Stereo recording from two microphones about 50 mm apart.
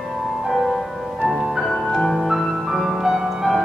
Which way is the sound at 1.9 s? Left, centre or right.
Centre.